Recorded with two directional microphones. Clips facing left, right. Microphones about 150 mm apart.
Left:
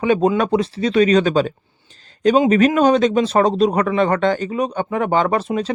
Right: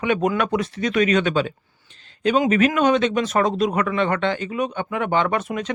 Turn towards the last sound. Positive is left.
turn(degrees=30)  # may be behind; listen again after turning